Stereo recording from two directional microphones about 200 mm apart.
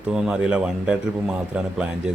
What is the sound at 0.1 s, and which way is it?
Speech, 5° right (ahead or behind).